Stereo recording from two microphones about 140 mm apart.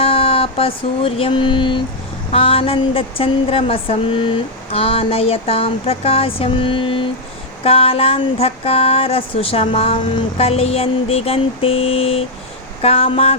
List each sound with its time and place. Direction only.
0.0 s music: 45° left (ahead or behind)
2.3 s speech: 40° left (ahead or behind)
4.7 s a sound: 45° left (ahead or behind)